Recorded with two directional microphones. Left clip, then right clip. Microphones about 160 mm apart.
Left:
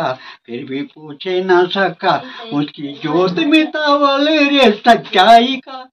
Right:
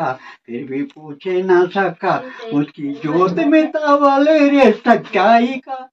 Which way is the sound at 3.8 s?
10° left (ahead or behind).